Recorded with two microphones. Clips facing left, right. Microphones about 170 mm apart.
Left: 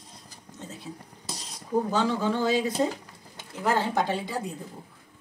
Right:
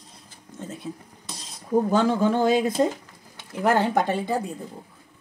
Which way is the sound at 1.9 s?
50° right (ahead or behind).